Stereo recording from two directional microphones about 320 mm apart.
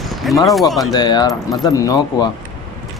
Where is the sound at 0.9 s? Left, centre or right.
Centre.